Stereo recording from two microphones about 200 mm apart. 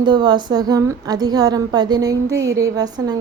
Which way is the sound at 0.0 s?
20° right (ahead or behind).